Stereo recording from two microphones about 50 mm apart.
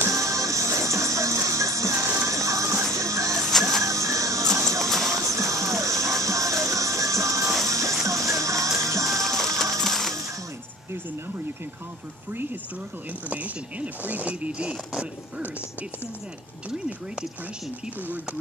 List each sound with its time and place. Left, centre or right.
0.1 s music: right
3.3 s music: centre
3.8 s music: right
4.8 s music: centre
5.1 s music: right
9.2 s music: centre
13.3 s speech: right